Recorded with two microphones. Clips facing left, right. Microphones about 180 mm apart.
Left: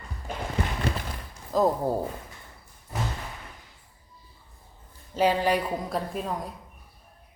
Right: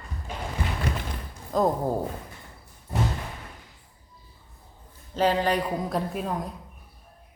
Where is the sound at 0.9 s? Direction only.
30° left (ahead or behind).